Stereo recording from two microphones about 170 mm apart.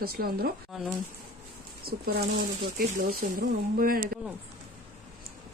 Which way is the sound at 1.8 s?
65° right (ahead or behind).